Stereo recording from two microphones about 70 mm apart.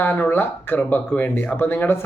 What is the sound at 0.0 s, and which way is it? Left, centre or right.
Speech, left.